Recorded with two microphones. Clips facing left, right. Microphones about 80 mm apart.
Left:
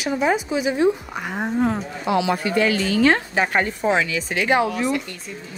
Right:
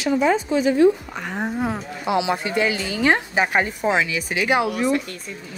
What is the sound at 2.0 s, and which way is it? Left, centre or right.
Speech, centre.